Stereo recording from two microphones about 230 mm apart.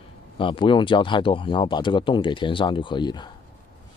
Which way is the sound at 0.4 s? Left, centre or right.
Left.